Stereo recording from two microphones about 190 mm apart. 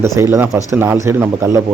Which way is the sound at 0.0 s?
15° right (ahead or behind).